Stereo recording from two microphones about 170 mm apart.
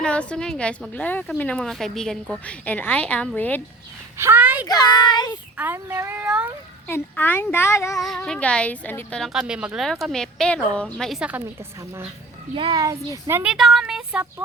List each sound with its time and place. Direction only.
0.0 s a woman's voice: 5° left (ahead or behind)
4.2 s speech: 10° right (ahead or behind)
4.6 s a child's voice: 25° left (ahead or behind)
5.5 s speech: 10° right (ahead or behind)
6.8 s a woman's voice: 10° left (ahead or behind)
8.0 s a woman's voice: 5° left (ahead or behind)
12.5 s speech: 30° right (ahead or behind); by 14.4 s 5° right (ahead or behind)